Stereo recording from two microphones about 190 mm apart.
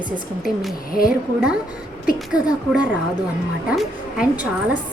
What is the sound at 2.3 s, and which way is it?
A woman's voice, 5° right (ahead or behind).